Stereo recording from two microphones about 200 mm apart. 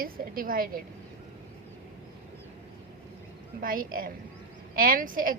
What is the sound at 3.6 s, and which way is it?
A woman's voice, 45° right (ahead or behind).